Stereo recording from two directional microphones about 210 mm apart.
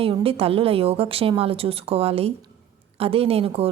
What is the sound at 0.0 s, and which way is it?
A woman's voice, 25° right (ahead or behind).